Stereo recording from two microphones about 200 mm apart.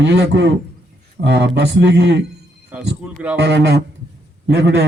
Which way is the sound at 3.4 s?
60° right (ahead or behind).